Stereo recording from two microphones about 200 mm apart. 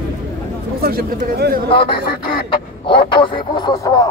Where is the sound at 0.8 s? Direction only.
50° right (ahead or behind).